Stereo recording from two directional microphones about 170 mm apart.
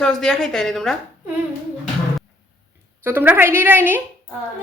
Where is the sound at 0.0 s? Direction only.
5° left (ahead or behind).